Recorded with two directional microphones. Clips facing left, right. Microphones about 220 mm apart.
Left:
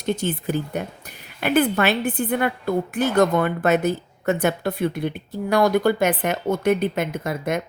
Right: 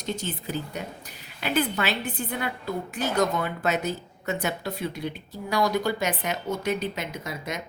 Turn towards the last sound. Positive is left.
turn(degrees=55)  # may be behind; listen again after turning